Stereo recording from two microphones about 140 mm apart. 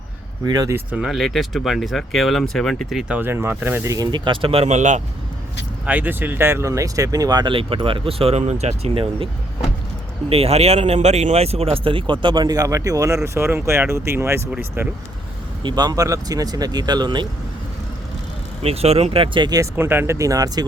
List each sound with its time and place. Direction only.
0.4 s speech: 25° right (ahead or behind)
0.9 s speech: 5° right (ahead or behind)
3.2 s speech: 15° right (ahead or behind)
3.9 s speech: 30° right (ahead or behind); by 5.0 s 60° right (ahead or behind)
5.8 s speech: 10° right (ahead or behind)
15.6 s speech: 30° right (ahead or behind)
18.6 s speech: 45° right (ahead or behind)
19.7 s speech: 15° right (ahead or behind)